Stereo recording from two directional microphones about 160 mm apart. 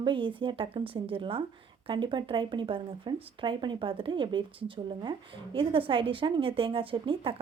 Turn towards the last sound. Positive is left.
turn(degrees=-35)  # may be behind; listen again after turning